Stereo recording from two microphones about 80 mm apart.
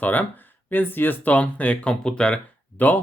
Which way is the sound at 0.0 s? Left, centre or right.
Left.